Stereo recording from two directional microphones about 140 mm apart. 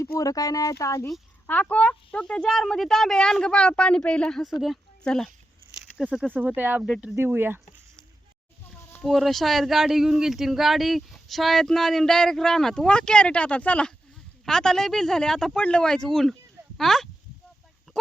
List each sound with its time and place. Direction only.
0.2 s speech: 25° left (ahead or behind)
1.5 s speech: 10° left (ahead or behind); by 7.6 s 15° right (ahead or behind)
9.0 s speech: centre (ahead or behind)